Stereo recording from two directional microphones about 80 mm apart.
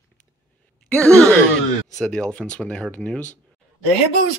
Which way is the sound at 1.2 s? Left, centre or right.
Centre.